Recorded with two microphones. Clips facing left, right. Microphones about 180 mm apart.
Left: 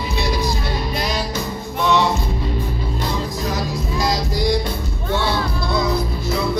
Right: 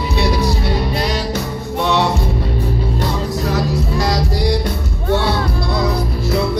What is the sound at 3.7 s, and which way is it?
Music, 65° right (ahead or behind).